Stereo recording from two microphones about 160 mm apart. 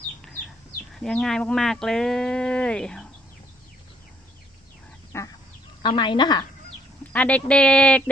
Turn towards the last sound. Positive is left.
turn(degrees=5)  # may be behind; listen again after turning